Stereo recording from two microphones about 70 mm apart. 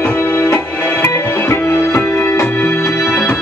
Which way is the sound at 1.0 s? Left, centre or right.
Left.